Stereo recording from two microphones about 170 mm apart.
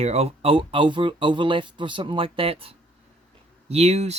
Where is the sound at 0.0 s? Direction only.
40° right (ahead or behind).